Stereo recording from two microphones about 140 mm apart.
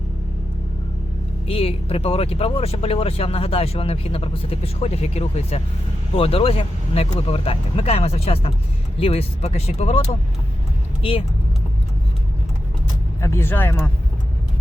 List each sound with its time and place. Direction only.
1.5 s speech: 45° left (ahead or behind)
13.2 s speech: 15° left (ahead or behind)